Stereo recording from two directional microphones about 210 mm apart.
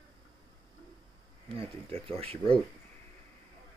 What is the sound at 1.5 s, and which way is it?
Speech, 25° right (ahead or behind).